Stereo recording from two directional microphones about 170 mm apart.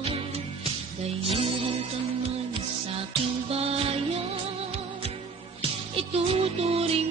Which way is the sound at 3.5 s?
35° right (ahead or behind).